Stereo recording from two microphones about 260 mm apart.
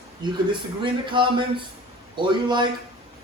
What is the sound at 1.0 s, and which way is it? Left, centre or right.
Speech, centre.